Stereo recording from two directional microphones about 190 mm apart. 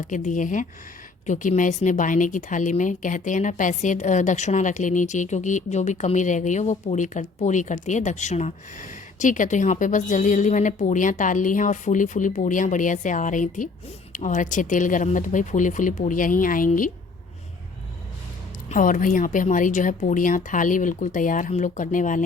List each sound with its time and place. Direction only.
0.0 s a woman's voice: 40° left (ahead or behind)
18.7 s a woman's voice: 45° left (ahead or behind)